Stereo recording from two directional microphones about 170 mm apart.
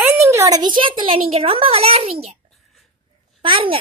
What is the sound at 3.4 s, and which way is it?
Speech, 30° right (ahead or behind).